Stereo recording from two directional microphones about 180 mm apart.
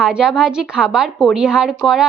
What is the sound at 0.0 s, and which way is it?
A woman's voice, 5° right (ahead or behind).